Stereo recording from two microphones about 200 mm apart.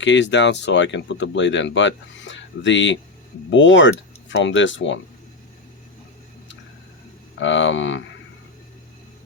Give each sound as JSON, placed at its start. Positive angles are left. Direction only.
{"t": 0.0, "sound": "speech", "side_deg": 65}
{"t": 7.3, "sound": "speech", "side_deg": 65}